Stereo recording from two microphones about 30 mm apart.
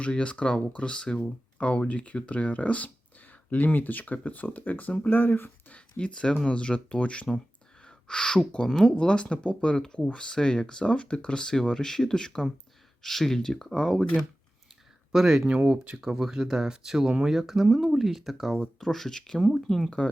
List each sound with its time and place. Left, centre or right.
0.0 s speech: left
1.5 s speech: left
3.2 s speech: left
6.0 s speech: left
7.8 s a sound: left
8.6 s speech: centre
9.0 s speech: left
13.0 s speech: centre
15.1 s speech: centre
15.6 s speech: right
16.0 s speech: centre
17.3 s speech: centre
18.0 s speech: centre
18.8 s speech: centre